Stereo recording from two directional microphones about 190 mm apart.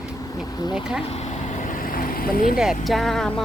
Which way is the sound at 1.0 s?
35° left (ahead or behind).